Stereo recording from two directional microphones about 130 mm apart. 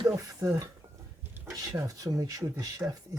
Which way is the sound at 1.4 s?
25° right (ahead or behind).